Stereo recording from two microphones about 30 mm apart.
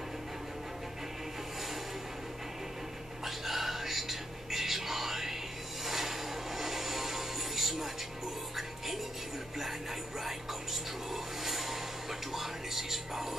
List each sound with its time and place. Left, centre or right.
3.3 s whispering: centre
5.9 s music: centre
11.4 s a sound: centre
12.3 s music: centre